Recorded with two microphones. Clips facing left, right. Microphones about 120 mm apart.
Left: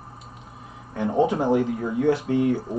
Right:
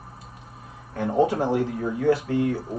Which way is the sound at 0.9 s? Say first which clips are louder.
Even; 20° left (ahead or behind).